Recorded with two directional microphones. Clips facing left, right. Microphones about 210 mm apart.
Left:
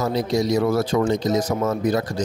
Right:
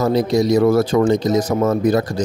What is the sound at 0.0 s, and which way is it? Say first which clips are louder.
Speech: right 5 dB; 45° right (ahead or behind).